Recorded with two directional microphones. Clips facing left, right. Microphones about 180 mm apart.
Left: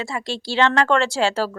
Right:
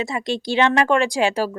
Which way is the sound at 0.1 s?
15° right (ahead or behind).